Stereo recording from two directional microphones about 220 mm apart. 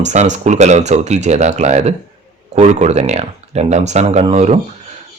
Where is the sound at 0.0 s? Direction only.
30° right (ahead or behind).